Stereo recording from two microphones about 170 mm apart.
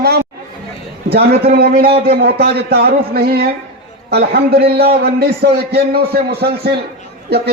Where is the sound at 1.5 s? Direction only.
65° right (ahead or behind).